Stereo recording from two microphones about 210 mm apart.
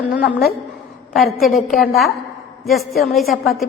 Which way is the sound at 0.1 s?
45° left (ahead or behind).